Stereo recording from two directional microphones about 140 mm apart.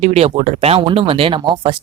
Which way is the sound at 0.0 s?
45° right (ahead or behind).